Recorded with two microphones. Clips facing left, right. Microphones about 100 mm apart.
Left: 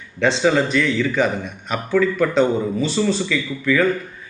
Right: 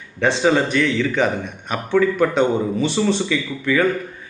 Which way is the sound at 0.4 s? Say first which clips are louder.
Right 1 dB; 20° right (ahead or behind).